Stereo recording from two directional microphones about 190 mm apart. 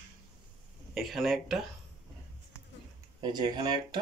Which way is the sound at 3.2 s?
20° right (ahead or behind).